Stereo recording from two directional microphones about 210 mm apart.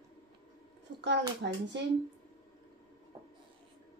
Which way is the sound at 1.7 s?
55° right (ahead or behind).